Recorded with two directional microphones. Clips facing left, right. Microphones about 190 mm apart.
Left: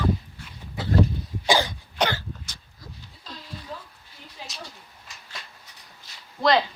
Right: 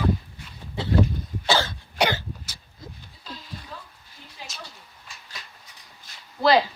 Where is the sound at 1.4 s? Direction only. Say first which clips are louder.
Left 1 dB; 15° left (ahead or behind).